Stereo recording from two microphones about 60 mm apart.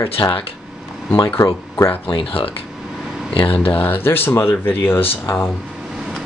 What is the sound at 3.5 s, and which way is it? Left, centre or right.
Speech, left.